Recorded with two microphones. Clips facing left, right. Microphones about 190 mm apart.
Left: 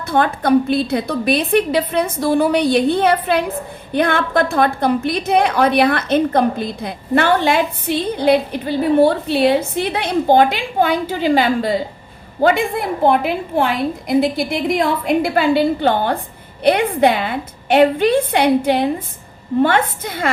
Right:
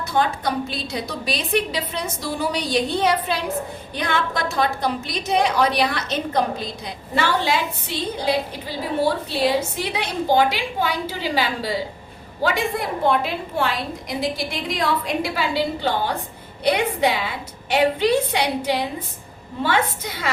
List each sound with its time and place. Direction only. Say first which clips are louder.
0.1 s a woman's voice: left 8 dB; 55° left (ahead or behind)